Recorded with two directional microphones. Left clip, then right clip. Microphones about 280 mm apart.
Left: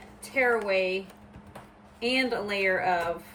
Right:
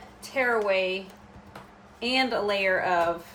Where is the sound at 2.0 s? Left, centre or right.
Centre.